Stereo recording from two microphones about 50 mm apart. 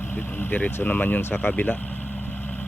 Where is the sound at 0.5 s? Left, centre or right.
Left.